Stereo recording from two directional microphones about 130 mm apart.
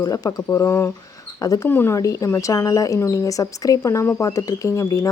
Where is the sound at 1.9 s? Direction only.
25° left (ahead or behind).